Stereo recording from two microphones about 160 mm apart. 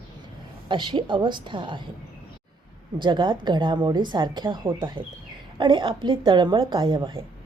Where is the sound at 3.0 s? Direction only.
30° right (ahead or behind).